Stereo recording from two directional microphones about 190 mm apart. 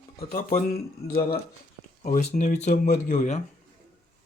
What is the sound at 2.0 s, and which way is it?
Speech, 40° left (ahead or behind).